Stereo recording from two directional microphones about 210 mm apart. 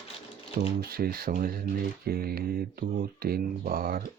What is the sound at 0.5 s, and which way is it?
Speech, 45° right (ahead or behind).